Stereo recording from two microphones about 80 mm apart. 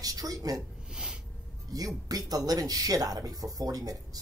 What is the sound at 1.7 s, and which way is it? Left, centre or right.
Speech, right.